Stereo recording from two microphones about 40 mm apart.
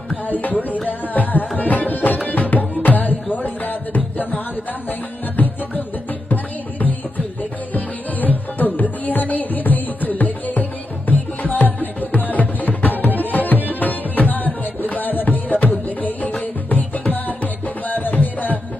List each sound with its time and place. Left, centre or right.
0.3 s music: left
1.5 s tabla: left
2.2 s music: left
3.3 s a sound: left
5.4 s music: left
13.3 s tabla: left
13.7 s music: left